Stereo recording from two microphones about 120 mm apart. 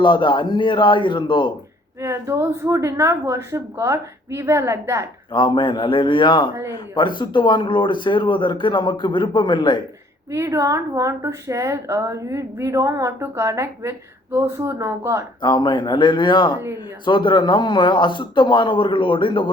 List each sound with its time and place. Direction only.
0.0 s speech: 40° left (ahead or behind)
2.0 s a woman's voice: 25° right (ahead or behind)
5.3 s speech: 40° left (ahead or behind)
10.3 s a woman's voice: 25° right (ahead or behind)
15.4 s speech: 35° left (ahead or behind)